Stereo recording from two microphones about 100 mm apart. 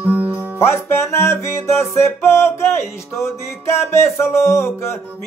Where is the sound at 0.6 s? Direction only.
25° left (ahead or behind).